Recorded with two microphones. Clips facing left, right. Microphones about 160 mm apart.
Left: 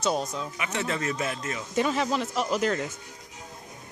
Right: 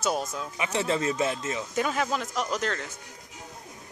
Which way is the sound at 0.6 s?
30° right (ahead or behind).